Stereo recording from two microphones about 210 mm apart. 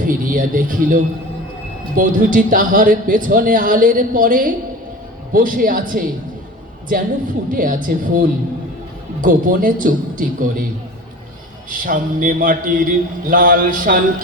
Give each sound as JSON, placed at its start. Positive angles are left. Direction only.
{"t": 0.0, "sound": "a man's voice", "side_deg": -40}
{"t": 7.5, "sound": "a man's voice", "side_deg": -40}
{"t": 11.7, "sound": "a man's voice", "side_deg": -40}